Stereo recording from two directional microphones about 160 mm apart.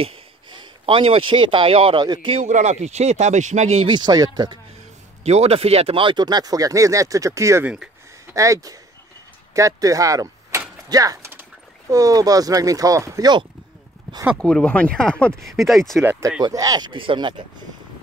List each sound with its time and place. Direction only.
0.0 s speech: 35° right (ahead or behind)
2.4 s speech: 45° right (ahead or behind); by 4.6 s 25° right (ahead or behind)
5.2 s speech: 40° right (ahead or behind); by 8.4 s 10° right (ahead or behind)
8.4 s speech: 20° right (ahead or behind)
14.4 s speech: 5° left (ahead or behind)
16.0 s speech: 15° right (ahead or behind)